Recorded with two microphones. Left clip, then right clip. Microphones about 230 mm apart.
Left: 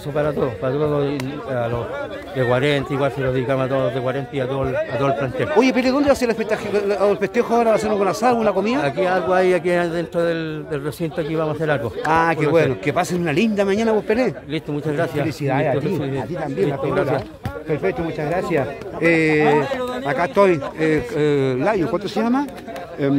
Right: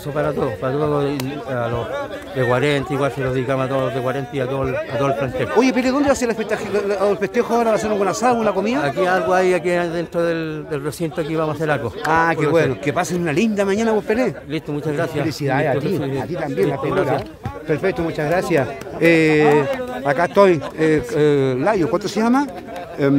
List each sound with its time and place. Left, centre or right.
0.1 s speech: centre
2.3 s a man's voice: centre
10.1 s a man's voice: centre
17.6 s speech: centre